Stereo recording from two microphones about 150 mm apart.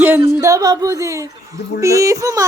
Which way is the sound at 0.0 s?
15° right (ahead or behind).